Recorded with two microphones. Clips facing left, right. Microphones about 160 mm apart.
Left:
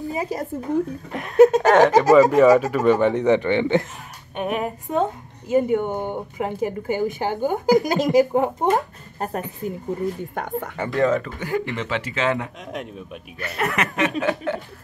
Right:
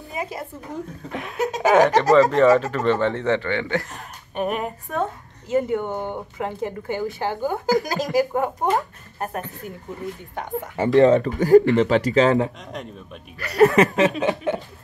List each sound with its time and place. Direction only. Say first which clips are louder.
0.1 s speech: left 1 dB; 40° left (ahead or behind)
1.1 s speech: left 12 dB; centre (ahead or behind)
2.0 s speech: left 2 dB; 15° left (ahead or behind)
4.4 s speech: even; centre (ahead or behind)
4.9 s a woman's voice: left 4 dB; 20° left (ahead or behind)
10.3 s speech: left 2 dB; 55° left (ahead or behind)
10.8 s speech: right 6 dB; 25° right (ahead or behind)
13.6 s chuckle: right 8 dB; 30° right (ahead or behind)